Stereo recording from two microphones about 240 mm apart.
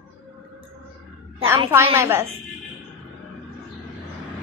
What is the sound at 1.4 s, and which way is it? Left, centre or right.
Speech, centre.